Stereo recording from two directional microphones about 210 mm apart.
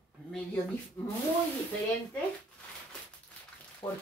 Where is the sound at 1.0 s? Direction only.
10° left (ahead or behind).